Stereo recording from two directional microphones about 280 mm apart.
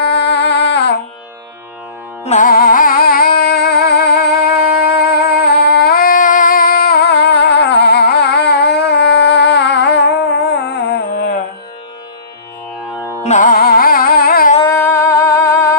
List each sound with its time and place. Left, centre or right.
0.0 s music: left
2.2 s music: left
12.9 s music: centre
13.2 s music: left
14.6 s music: centre